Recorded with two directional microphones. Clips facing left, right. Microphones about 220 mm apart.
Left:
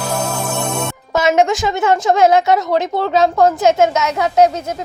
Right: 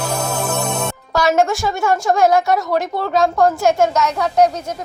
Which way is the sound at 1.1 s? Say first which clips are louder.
Left 2 dB; 20° left (ahead or behind).